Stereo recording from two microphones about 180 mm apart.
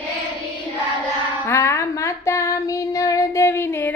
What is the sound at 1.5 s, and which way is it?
Child singing, 15° left (ahead or behind).